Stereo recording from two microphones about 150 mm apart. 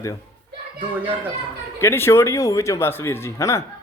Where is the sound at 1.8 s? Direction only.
15° left (ahead or behind).